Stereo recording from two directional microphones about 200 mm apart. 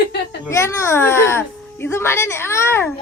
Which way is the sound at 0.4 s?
15° left (ahead or behind).